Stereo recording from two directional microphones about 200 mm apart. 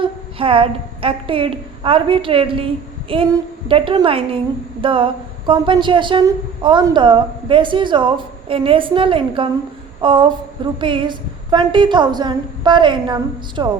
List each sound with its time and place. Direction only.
0.0 s a woman's voice: 25° right (ahead or behind)